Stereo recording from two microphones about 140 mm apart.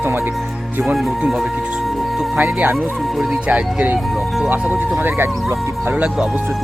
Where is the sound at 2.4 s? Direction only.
10° right (ahead or behind).